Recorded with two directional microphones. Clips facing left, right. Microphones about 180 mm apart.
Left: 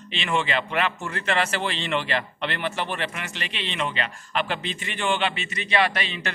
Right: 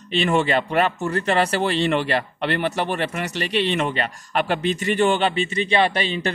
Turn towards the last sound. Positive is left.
turn(degrees=-35)  # may be behind; listen again after turning